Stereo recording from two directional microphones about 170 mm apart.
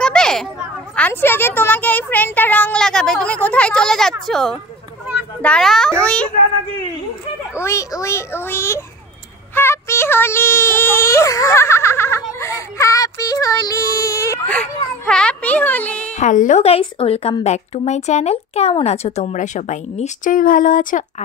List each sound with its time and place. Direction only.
0.0 s a sound: 5° left (ahead or behind)
0.9 s music: 10° left (ahead or behind)
4.3 s a child's voice: centre (ahead or behind)
6.0 s music: 5° left (ahead or behind)
7.5 s music: 15° left (ahead or behind)
14.5 s music: 5° left (ahead or behind)
16.1 s speech: 45° left (ahead or behind)